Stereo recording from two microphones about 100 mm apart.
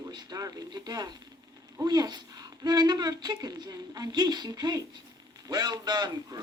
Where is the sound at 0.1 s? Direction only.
45° right (ahead or behind).